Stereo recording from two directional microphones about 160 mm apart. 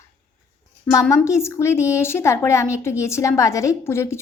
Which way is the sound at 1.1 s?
20° left (ahead or behind).